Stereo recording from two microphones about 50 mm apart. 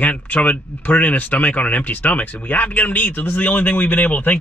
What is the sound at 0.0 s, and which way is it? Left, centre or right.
Speech, left.